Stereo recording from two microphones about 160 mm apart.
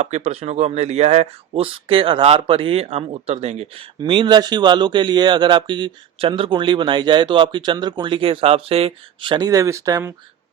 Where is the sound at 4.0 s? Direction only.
30° right (ahead or behind).